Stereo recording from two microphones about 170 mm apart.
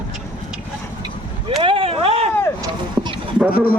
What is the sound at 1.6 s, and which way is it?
Vehicle, 30° right (ahead or behind).